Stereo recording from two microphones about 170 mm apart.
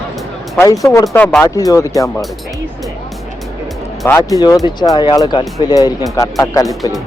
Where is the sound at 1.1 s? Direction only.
10° left (ahead or behind).